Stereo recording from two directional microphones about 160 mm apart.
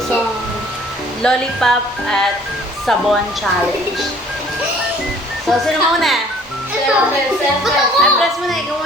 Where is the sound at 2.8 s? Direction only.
Centre (ahead or behind).